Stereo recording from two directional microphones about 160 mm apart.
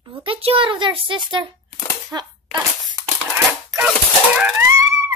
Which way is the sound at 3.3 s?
15° right (ahead or behind).